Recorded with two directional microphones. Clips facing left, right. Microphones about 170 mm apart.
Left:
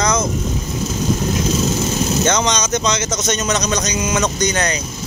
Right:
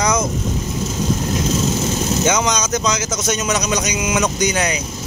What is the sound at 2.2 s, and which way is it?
Speech, 5° right (ahead or behind).